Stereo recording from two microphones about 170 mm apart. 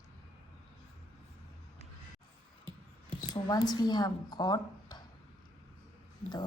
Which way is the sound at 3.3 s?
20° left (ahead or behind).